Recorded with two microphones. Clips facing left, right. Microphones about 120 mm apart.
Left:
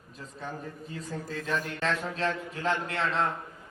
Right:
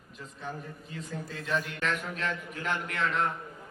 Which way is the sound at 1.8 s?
30° left (ahead or behind).